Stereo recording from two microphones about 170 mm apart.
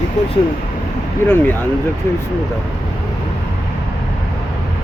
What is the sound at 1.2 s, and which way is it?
Speech, 15° left (ahead or behind).